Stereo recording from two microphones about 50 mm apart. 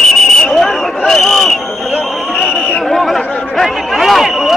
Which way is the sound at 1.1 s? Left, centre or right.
Centre.